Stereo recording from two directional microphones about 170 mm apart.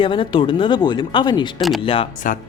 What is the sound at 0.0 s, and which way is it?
Speech, 30° left (ahead or behind).